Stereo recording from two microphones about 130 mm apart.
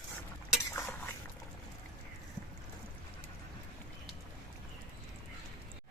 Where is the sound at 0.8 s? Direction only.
15° left (ahead or behind).